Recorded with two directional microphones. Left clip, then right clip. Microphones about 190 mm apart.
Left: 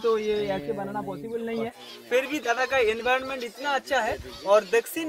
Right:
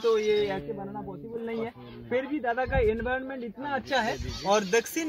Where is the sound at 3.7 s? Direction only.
Centre (ahead or behind).